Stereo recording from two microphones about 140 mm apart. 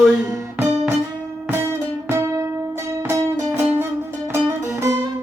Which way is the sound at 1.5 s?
15° right (ahead or behind).